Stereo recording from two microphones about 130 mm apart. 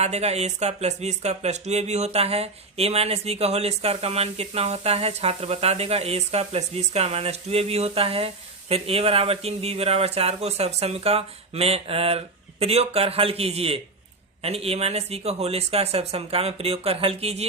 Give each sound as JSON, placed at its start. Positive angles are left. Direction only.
{"t": 0.0, "sound": "speech", "side_deg": -55}